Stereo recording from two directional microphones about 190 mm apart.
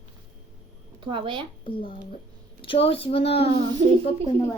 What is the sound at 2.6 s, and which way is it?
Speech, 30° left (ahead or behind).